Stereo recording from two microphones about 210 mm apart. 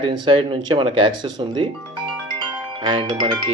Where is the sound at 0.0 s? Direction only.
25° right (ahead or behind).